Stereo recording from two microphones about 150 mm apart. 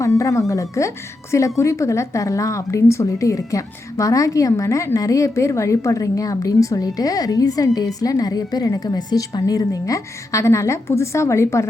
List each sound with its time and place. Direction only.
0.0 s a woman's voice: 20° left (ahead or behind)